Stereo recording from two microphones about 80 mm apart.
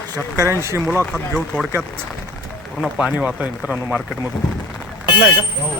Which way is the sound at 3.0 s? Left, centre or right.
Centre.